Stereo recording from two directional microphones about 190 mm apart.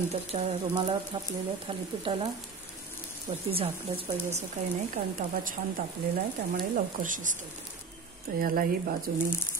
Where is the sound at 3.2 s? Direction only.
30° right (ahead or behind).